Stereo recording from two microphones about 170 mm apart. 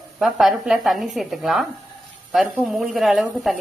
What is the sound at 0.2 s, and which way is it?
A woman's voice, centre (ahead or behind).